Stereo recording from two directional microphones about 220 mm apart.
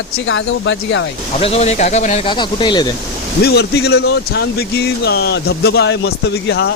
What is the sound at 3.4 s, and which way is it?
Speech, 50° left (ahead or behind).